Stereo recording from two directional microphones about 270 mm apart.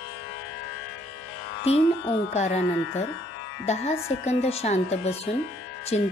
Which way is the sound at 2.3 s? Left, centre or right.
Left.